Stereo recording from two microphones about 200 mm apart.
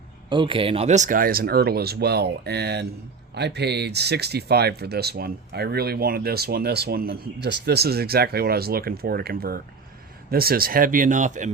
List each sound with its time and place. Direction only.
0.3 s speech: 25° right (ahead or behind)